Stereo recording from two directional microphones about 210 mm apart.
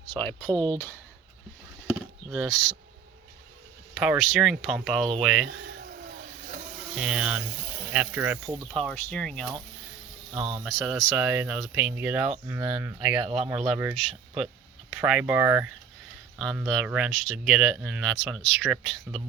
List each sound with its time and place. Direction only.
0.5 s speech: 20° right (ahead or behind)
1.9 s chop: centre (ahead or behind)
3.9 s speech: centre (ahead or behind)
6.9 s speech: 5° right (ahead or behind)
8.7 s speech: 5° left (ahead or behind)
13.2 s speech: 30° right (ahead or behind)
13.5 s speech: 5° right (ahead or behind)
15.0 s speech: 5° right (ahead or behind)